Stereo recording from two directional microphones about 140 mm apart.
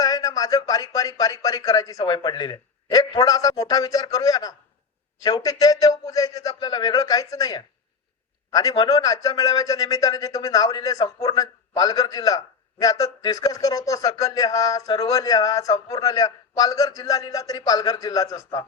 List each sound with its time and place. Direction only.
0.0 s speech: 25° left (ahead or behind)